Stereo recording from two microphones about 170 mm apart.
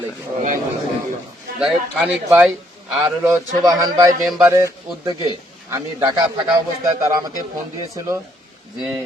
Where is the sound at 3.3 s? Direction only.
20° right (ahead or behind).